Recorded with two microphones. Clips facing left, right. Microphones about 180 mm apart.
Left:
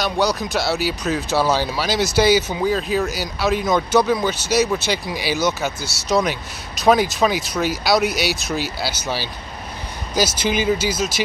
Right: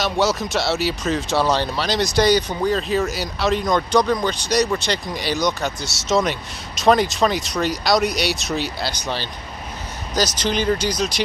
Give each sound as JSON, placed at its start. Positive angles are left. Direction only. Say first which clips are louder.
{"t": 0.0, "sound": "speech", "louder": "even", "side_deg": 0}